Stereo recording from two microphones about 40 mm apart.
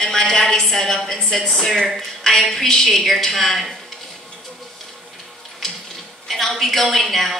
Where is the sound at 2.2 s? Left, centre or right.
Centre.